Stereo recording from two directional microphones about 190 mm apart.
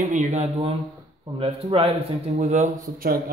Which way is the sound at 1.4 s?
30° right (ahead or behind).